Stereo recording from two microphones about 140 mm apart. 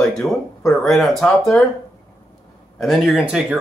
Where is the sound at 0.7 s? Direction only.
Centre (ahead or behind).